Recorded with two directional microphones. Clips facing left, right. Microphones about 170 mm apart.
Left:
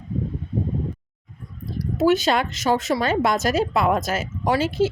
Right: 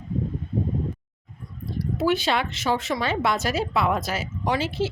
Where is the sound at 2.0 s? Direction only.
45° left (ahead or behind).